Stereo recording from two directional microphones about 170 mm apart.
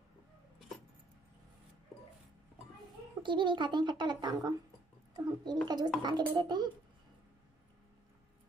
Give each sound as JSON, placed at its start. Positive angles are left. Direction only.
{"t": 3.2, "sound": "a child's voice", "side_deg": -30}